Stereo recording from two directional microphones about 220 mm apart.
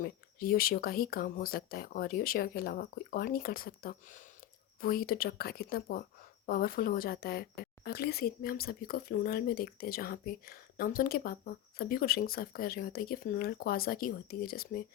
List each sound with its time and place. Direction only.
0.0 s speech: 40° left (ahead or behind)